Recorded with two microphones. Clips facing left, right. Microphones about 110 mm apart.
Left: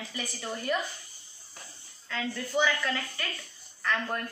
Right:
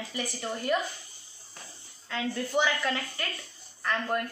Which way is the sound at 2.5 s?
20° right (ahead or behind).